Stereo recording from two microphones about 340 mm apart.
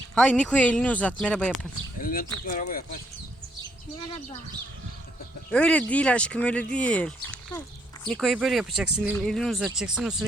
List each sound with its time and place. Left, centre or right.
0.1 s speech: centre
2.0 s speech: left
5.5 s speech: centre